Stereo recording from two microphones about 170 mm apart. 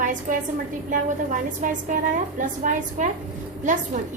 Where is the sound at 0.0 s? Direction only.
50° right (ahead or behind).